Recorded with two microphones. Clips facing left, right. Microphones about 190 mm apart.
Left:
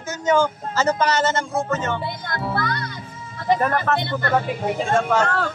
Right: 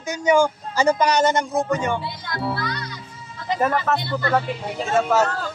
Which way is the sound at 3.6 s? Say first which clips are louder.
Even; centre (ahead or behind).